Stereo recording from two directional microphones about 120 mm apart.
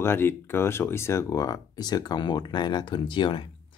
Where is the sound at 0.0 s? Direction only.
20° left (ahead or behind).